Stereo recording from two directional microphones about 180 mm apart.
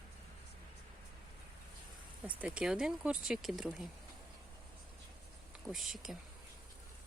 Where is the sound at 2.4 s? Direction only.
5° right (ahead or behind).